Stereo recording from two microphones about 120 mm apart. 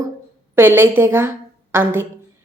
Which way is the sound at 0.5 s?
20° right (ahead or behind).